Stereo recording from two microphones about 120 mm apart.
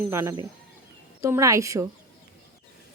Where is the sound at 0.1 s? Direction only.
20° right (ahead or behind).